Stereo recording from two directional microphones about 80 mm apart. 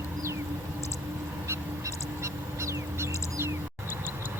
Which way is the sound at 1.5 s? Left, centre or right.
Right.